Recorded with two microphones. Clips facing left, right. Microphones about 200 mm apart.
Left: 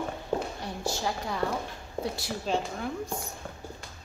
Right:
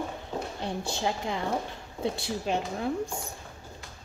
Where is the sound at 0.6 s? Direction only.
20° right (ahead or behind).